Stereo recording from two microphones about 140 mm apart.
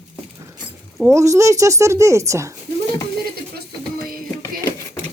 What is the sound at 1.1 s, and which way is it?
Speech, 20° right (ahead or behind).